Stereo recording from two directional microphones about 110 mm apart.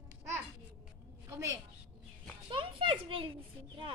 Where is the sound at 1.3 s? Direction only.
30° right (ahead or behind).